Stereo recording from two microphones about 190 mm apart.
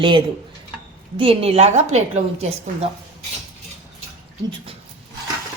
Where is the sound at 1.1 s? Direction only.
30° right (ahead or behind).